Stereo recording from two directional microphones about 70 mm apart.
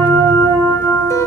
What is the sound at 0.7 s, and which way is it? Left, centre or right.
Music, left.